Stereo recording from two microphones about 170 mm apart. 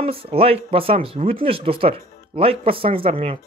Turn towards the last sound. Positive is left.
turn(degrees=-35)  # may be behind; listen again after turning